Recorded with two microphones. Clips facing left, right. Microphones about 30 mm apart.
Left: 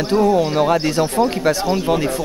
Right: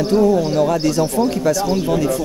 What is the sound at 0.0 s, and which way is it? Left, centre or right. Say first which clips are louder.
Speech: right 1 dB; left.